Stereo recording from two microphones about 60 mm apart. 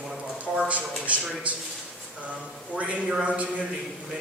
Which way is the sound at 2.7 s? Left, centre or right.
Centre.